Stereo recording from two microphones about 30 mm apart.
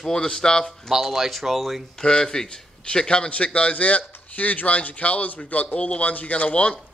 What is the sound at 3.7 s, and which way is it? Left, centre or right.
A man's voice, left.